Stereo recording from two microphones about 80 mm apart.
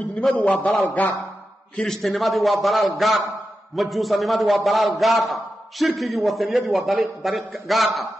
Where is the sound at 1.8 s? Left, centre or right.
Centre.